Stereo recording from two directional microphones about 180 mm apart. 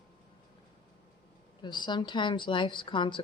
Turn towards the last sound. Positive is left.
turn(degrees=25)  # may be behind; listen again after turning